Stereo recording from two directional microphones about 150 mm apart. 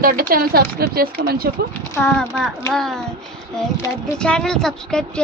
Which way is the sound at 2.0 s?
Centre (ahead or behind).